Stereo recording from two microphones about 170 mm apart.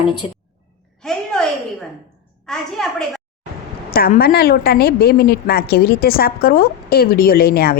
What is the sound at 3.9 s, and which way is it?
A woman's voice, 60° left (ahead or behind).